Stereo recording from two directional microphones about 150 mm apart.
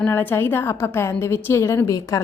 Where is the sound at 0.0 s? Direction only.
10° left (ahead or behind).